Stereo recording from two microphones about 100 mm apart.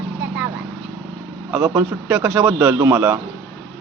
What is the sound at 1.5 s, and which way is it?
Speech, 20° right (ahead or behind).